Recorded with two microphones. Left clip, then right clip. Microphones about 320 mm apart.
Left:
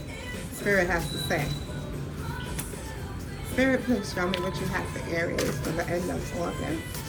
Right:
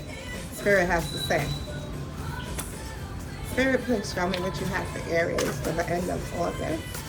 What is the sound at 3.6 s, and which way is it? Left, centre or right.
Speech, centre.